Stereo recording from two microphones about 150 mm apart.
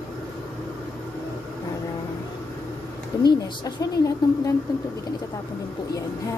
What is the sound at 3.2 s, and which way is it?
Speech, 25° left (ahead or behind).